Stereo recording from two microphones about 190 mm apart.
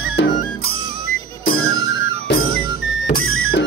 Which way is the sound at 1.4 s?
50° left (ahead or behind).